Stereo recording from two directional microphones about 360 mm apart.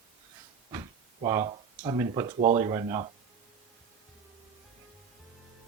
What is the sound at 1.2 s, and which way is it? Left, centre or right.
Speech, centre.